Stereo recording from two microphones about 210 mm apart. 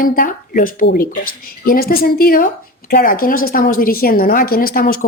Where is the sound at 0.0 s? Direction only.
40° left (ahead or behind).